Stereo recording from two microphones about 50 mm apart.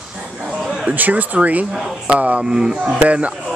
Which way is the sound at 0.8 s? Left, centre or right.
Right.